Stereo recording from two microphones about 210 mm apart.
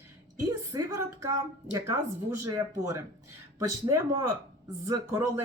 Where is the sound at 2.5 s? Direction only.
15° right (ahead or behind).